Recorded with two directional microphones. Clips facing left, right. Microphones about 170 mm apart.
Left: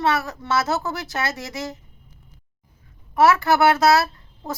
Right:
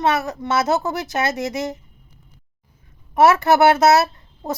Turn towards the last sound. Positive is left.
turn(degrees=-20)  # may be behind; listen again after turning